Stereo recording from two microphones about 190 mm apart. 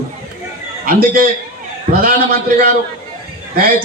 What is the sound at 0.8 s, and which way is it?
A man's voice, 50° right (ahead or behind).